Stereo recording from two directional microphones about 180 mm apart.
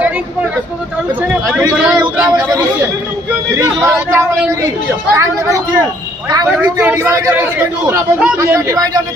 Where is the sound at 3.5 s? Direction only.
15° right (ahead or behind).